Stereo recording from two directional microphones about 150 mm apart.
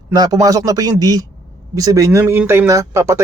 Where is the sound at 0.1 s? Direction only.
25° right (ahead or behind).